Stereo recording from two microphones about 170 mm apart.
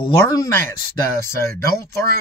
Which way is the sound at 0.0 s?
20° left (ahead or behind).